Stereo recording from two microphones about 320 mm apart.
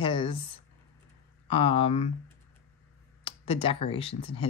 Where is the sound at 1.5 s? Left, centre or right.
Centre.